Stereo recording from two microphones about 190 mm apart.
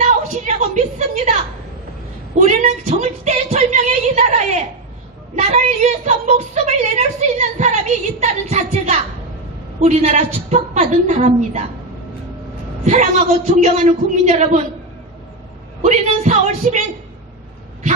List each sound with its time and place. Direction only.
0.0 s a sound: 35° right (ahead or behind)
2.4 s a woman's voice: 40° right (ahead or behind)
5.4 s a woman's voice: 35° right (ahead or behind)
12.8 s a woman's voice: 40° right (ahead or behind)
15.8 s a woman's voice: 40° right (ahead or behind)